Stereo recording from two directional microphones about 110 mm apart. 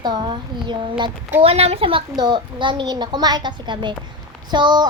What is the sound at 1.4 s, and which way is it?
A woman's voice, 65° right (ahead or behind).